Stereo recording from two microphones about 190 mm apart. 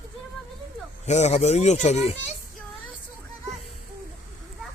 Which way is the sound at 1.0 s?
35° left (ahead or behind).